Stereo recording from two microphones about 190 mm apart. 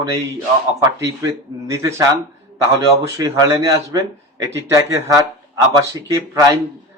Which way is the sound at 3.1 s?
15° right (ahead or behind).